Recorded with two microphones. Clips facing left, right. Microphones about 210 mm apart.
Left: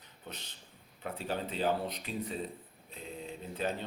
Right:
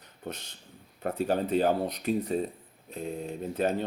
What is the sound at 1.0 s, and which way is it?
Speech, 45° right (ahead or behind).